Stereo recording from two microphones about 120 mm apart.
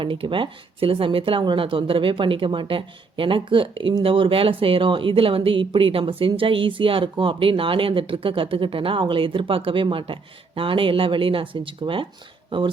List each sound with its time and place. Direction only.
0.0 s speech: 45° right (ahead or behind)